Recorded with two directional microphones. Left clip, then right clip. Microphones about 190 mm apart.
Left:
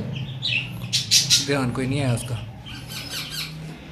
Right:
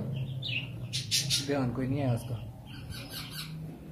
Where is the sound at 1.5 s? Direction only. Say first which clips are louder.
Left 8 dB; centre (ahead or behind).